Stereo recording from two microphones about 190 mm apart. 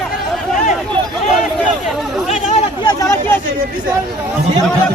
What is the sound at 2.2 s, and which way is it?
Chatter, 35° left (ahead or behind).